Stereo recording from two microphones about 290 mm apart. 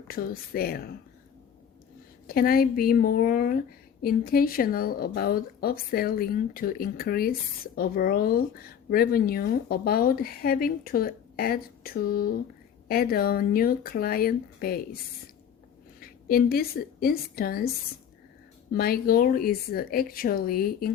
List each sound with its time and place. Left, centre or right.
0.1 s a woman's voice: left
2.2 s a woman's voice: left
16.3 s a woman's voice: left
18.7 s a woman's voice: left